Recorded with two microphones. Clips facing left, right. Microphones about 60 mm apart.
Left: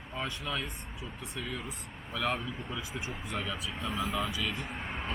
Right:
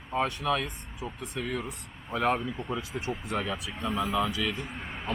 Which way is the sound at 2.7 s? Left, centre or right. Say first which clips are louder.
Right 7 dB; right.